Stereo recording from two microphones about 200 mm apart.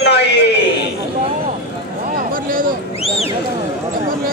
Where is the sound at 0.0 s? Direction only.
55° left (ahead or behind).